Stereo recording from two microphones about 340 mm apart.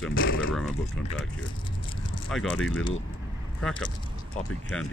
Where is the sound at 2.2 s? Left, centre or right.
Centre.